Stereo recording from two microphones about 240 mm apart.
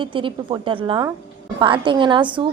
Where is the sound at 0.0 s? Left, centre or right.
Right.